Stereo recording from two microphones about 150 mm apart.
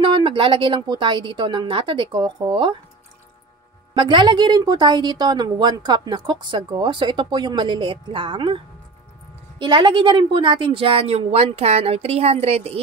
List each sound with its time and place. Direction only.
0.0 s a woman's voice: 30° right (ahead or behind)
3.9 s a woman's voice: 30° right (ahead or behind)